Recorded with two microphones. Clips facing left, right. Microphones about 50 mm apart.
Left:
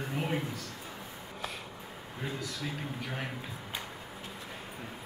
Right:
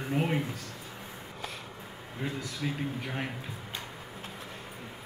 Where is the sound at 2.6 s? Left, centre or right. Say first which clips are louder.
Right 4 dB; centre.